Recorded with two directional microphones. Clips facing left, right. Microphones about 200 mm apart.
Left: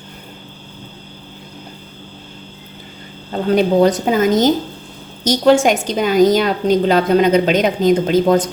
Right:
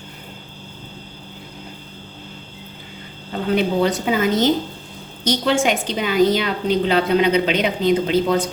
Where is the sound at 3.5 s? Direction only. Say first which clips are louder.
Left 6 dB; 40° left (ahead or behind).